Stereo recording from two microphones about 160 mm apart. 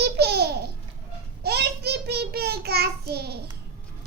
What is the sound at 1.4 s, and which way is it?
Child singing, 85° right.